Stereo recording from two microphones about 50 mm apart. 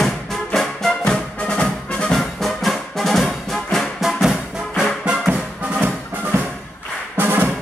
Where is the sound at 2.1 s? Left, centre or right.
Centre.